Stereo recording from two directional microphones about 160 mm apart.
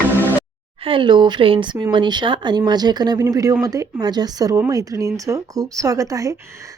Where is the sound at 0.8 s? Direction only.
30° right (ahead or behind).